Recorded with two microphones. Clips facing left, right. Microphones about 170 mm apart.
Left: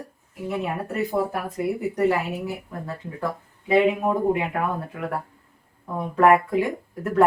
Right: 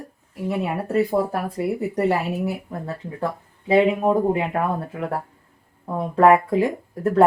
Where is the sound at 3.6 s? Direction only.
30° right (ahead or behind).